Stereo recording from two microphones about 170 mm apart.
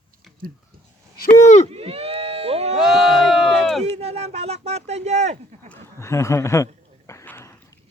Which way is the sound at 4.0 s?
40° right (ahead or behind).